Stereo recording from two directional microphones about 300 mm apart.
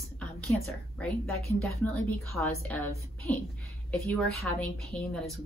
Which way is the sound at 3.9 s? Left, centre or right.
Centre.